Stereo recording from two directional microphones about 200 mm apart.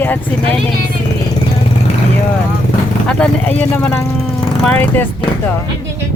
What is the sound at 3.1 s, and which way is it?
Speech, 5° left (ahead or behind).